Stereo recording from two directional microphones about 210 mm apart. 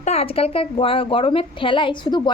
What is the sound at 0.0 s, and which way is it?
A woman's voice, 30° left (ahead or behind).